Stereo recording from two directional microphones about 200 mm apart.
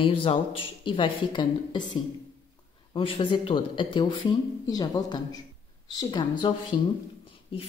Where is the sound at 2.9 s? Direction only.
25° left (ahead or behind).